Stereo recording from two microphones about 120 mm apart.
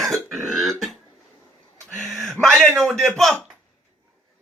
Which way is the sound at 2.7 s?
Centre (ahead or behind).